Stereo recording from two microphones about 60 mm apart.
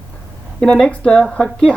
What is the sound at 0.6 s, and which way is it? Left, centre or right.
Speech, centre.